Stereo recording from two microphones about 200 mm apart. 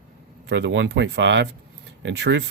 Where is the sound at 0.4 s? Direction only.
65° right (ahead or behind).